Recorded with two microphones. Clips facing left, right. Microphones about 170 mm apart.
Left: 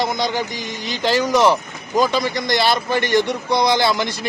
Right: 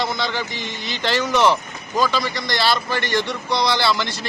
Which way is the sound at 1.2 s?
10° left (ahead or behind).